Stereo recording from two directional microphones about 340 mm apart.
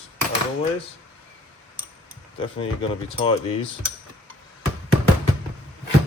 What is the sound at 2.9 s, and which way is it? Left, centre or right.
Speech, centre.